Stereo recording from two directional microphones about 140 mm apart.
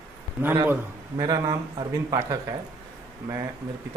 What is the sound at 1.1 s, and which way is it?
A man's voice, 30° right (ahead or behind).